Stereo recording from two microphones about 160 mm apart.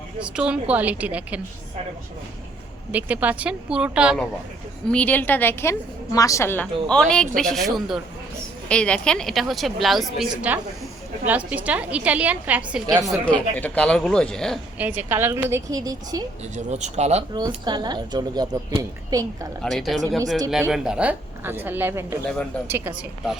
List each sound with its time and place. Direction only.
0.2 s a woman's voice: 5° right (ahead or behind)
2.9 s a woman's voice: 10° right (ahead or behind)
4.9 s a woman's voice: 10° left (ahead or behind); by 12.8 s 10° right (ahead or behind)
13.1 s a woman's voice: 5° left (ahead or behind)
14.8 s a woman's voice: 10° right (ahead or behind)
16.4 s speech: 45° right (ahead or behind)
17.7 s a woman's voice: 25° right (ahead or behind)
19.6 s a woman's voice: centre (ahead or behind)